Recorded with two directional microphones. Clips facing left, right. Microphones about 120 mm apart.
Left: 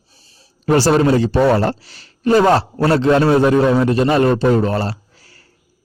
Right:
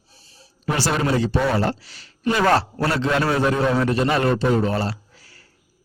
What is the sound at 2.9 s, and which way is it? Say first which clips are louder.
A man's voice: left 9 dB; 35° left (ahead or behind).